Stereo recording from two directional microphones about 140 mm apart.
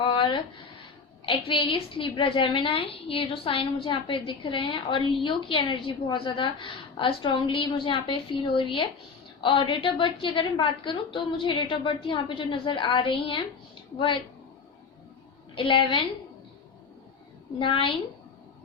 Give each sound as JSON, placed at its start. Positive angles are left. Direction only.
{"t": 0.0, "sound": "a sound", "side_deg": 35}
{"t": 1.2, "sound": "a woman's voice", "side_deg": 40}
{"t": 15.5, "sound": "a woman's voice", "side_deg": 35}
{"t": 17.6, "sound": "a woman's voice", "side_deg": 35}